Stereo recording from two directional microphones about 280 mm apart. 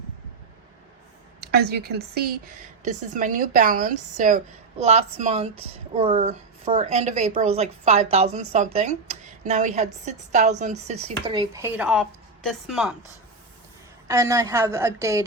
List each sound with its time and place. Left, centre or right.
1.4 s a woman's voice: right; by 12.9 s centre
14.1 s speech: centre